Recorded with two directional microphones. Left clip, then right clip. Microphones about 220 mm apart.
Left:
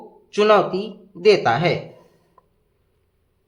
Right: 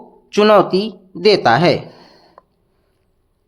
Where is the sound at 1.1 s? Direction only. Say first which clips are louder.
Right 4 dB; 30° right (ahead or behind).